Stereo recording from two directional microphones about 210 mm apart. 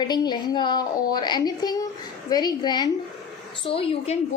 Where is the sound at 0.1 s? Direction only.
20° left (ahead or behind).